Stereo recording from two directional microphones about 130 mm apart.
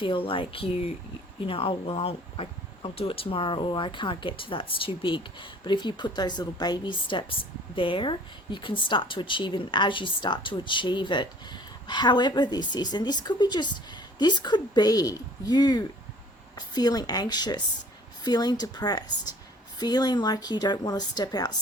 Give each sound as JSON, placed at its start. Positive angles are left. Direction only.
{"t": 0.0, "sound": "a woman's voice", "side_deg": 40}